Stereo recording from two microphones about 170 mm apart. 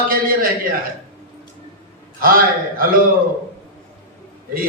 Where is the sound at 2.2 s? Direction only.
60° right (ahead or behind).